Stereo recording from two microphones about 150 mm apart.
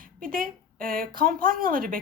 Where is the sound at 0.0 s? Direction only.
70° right (ahead or behind).